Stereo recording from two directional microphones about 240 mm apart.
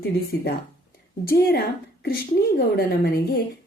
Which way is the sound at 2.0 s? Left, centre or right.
Left.